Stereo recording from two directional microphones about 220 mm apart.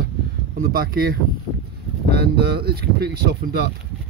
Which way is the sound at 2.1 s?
45° right (ahead or behind).